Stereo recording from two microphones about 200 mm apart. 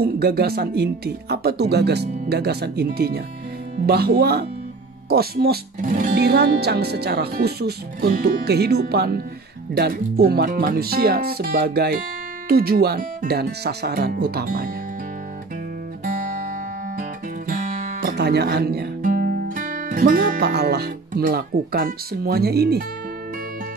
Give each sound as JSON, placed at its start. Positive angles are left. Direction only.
{"t": 0.0, "sound": "speech", "side_deg": -50}
{"t": 17.5, "sound": "music", "side_deg": -40}
{"t": 18.1, "sound": "speech", "side_deg": -55}